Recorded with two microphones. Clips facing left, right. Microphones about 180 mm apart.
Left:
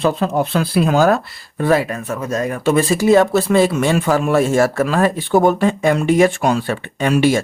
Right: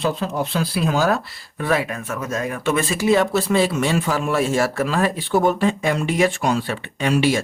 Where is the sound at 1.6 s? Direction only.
40° left (ahead or behind).